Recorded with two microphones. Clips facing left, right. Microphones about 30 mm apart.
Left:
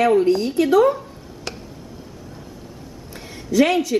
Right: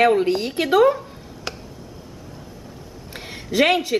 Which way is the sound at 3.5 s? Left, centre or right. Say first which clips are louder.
Left 1 dB; right.